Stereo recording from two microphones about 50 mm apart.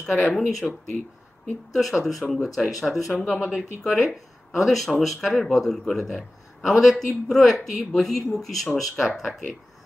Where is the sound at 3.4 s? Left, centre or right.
Centre.